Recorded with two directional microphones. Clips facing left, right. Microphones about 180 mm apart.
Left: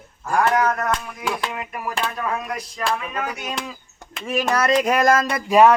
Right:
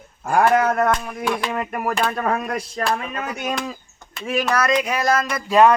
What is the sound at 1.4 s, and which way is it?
Speech, 50° right (ahead or behind).